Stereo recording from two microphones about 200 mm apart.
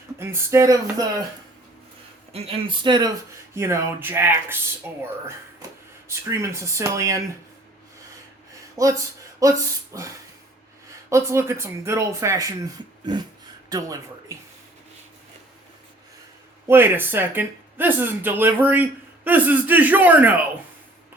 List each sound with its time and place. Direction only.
0.2 s speech: 15° right (ahead or behind)
2.3 s speech: 30° right (ahead or behind); by 4.5 s 10° right (ahead or behind)
6.1 s speech: 15° right (ahead or behind)
8.7 s speech: 15° right (ahead or behind)
11.1 s speech: 15° right (ahead or behind)
16.6 s speech: 10° right (ahead or behind)